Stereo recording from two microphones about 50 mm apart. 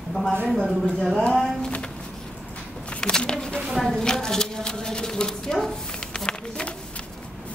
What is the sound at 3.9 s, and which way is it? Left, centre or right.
A woman's voice, centre.